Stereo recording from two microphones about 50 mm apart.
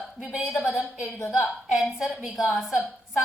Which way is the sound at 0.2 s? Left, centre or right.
Centre.